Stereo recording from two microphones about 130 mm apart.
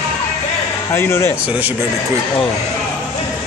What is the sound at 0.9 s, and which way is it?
Speech, 20° left (ahead or behind).